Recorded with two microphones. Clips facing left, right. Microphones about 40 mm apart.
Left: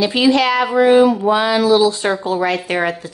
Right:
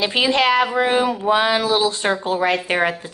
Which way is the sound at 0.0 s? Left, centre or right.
Right.